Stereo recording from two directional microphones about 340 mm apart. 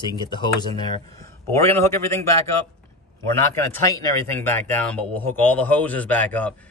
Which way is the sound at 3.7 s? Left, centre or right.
Centre.